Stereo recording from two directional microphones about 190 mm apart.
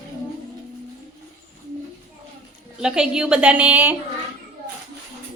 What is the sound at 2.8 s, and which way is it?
A woman's voice, 5° right (ahead or behind).